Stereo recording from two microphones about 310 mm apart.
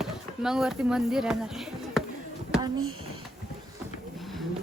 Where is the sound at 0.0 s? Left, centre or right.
Centre.